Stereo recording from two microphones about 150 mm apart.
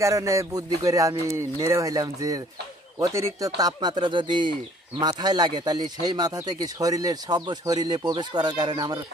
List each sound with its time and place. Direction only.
0.0 s speech: 20° right (ahead or behind)